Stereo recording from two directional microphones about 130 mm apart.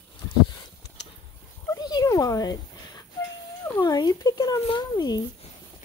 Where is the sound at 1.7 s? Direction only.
30° left (ahead or behind).